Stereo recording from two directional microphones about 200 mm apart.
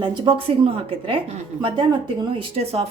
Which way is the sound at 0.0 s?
25° right (ahead or behind).